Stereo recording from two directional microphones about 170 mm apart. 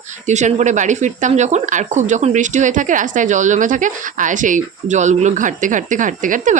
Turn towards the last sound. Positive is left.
turn(degrees=-50)  # may be behind; listen again after turning